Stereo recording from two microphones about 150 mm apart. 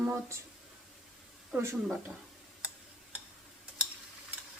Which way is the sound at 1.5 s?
15° right (ahead or behind).